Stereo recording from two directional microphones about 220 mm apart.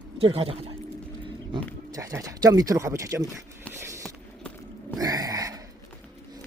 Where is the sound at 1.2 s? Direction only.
20° right (ahead or behind).